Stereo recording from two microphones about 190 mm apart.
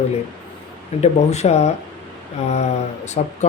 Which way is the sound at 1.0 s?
35° left (ahead or behind).